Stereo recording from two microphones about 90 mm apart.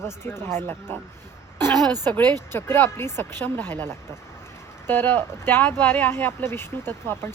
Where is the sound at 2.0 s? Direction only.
20° left (ahead or behind).